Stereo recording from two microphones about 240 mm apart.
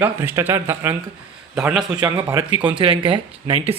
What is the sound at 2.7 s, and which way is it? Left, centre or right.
Speech, right.